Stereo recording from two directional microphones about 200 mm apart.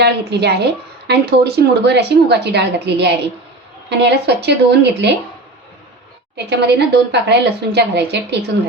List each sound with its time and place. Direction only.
0.0 s a woman's voice: 55° right (ahead or behind)
6.3 s a woman's voice: 55° right (ahead or behind)